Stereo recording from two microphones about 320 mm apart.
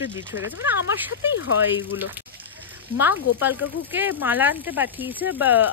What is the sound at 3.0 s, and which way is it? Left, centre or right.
Speech, centre.